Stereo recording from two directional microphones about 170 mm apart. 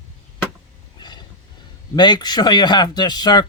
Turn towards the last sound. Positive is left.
turn(degrees=25)  # may be behind; listen again after turning